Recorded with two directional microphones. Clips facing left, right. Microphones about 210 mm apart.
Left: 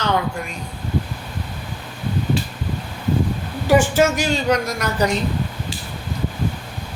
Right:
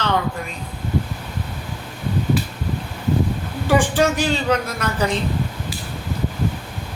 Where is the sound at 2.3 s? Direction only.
25° left (ahead or behind).